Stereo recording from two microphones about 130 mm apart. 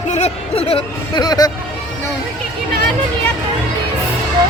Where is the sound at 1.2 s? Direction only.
30° left (ahead or behind).